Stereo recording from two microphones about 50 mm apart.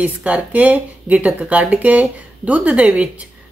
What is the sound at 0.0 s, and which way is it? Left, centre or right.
A woman's voice, right.